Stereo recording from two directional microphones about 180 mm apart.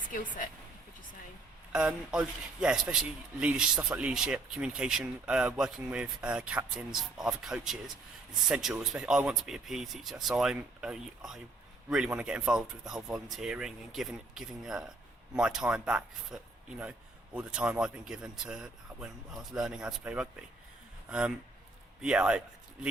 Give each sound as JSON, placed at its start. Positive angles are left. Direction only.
{"t": 0.1, "sound": "speech", "side_deg": 50}
{"t": 1.7, "sound": "a man's voice", "side_deg": -5}